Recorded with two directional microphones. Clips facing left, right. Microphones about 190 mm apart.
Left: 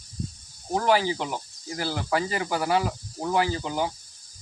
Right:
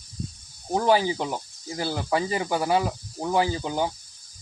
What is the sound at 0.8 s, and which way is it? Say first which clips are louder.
Speech: right 2 dB; 20° right (ahead or behind).